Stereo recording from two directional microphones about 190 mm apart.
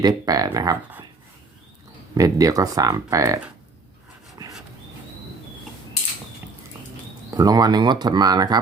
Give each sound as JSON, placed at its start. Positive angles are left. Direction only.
{"t": 0.0, "sound": "speech", "side_deg": -20}
{"t": 2.1, "sound": "speech", "side_deg": -20}
{"t": 4.4, "sound": "dog", "side_deg": -20}
{"t": 7.3, "sound": "speech", "side_deg": -20}